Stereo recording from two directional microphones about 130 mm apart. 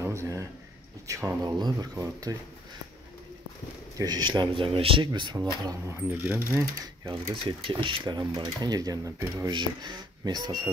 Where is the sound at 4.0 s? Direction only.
30° right (ahead or behind); by 5.1 s 45° right (ahead or behind).